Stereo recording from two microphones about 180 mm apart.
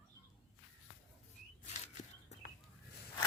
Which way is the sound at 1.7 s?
40° left (ahead or behind).